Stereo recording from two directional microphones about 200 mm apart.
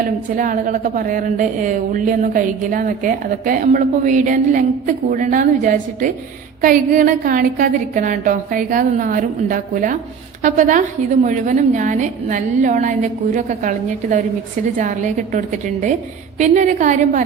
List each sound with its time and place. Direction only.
0.3 s a woman's voice: 40° right (ahead or behind)